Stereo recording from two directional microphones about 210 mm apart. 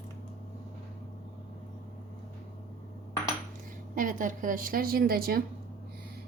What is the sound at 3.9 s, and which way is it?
A woman's voice, 40° right (ahead or behind).